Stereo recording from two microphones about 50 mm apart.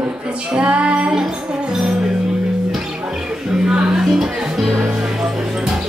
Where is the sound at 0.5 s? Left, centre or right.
Right.